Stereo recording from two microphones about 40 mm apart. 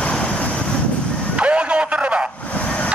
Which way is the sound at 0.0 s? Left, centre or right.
Left.